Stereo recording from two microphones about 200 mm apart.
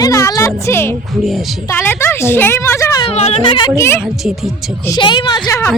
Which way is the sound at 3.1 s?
30° left (ahead or behind).